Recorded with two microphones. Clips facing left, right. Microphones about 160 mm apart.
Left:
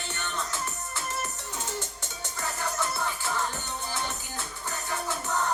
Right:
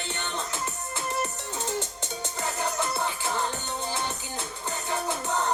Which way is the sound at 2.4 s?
20° right (ahead or behind).